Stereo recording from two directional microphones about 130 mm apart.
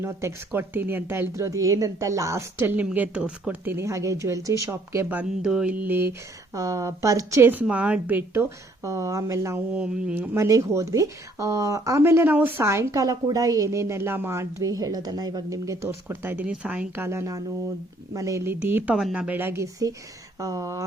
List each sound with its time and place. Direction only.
0.0 s a woman's voice: 20° right (ahead or behind)
6.5 s a woman's voice: 25° right (ahead or behind)
9.7 s a woman's voice: 10° right (ahead or behind)
10.3 s a woman's voice: 20° right (ahead or behind)
18.9 s a woman's voice: 5° right (ahead or behind); by 20.8 s 25° right (ahead or behind)